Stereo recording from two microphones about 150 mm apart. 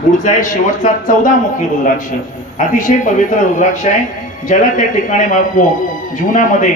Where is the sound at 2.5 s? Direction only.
60° left (ahead or behind).